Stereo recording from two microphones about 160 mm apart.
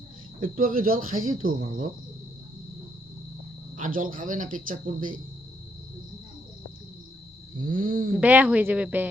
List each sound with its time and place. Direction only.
0.3 s speech: 60° right (ahead or behind)
3.8 s speech: 55° right (ahead or behind)
7.6 s speech: 60° right (ahead or behind)
8.2 s speech: 10° right (ahead or behind)